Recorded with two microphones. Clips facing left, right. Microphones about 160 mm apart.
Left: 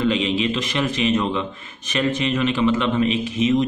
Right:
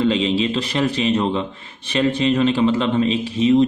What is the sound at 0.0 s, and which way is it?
A man's voice, 30° right (ahead or behind).